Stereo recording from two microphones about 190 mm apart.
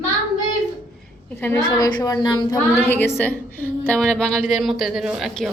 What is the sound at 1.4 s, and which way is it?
Speech, 10° left (ahead or behind).